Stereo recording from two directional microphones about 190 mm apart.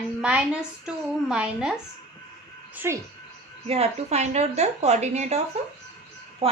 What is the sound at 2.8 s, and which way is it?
Speech, 10° right (ahead or behind).